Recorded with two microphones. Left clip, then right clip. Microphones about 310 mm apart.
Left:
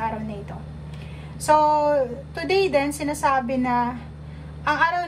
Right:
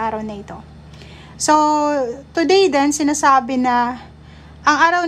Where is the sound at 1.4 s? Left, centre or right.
Centre.